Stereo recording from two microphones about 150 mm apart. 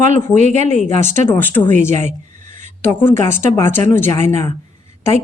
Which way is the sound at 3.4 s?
15° left (ahead or behind).